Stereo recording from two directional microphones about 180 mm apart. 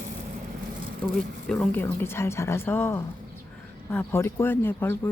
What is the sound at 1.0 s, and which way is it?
Speech, 5° left (ahead or behind).